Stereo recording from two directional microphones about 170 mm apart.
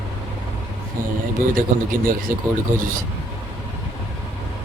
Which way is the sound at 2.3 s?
55° right (ahead or behind).